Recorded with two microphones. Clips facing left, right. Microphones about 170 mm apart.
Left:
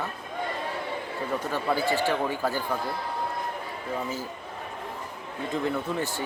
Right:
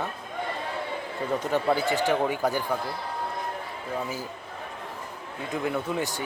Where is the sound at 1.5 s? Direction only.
20° right (ahead or behind).